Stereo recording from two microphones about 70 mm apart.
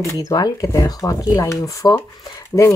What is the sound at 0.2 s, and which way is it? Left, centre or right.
Speech, left.